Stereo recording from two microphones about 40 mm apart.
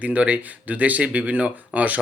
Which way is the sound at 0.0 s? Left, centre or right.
Right.